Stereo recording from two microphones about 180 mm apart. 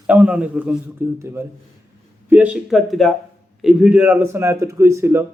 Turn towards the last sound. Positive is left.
turn(degrees=-15)  # may be behind; listen again after turning